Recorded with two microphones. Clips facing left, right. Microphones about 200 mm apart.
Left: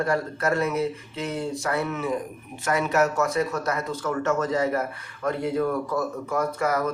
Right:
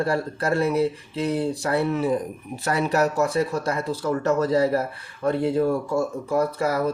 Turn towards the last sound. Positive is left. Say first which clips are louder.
# right 2 dB
turn(degrees=-30)  # may be behind; listen again after turning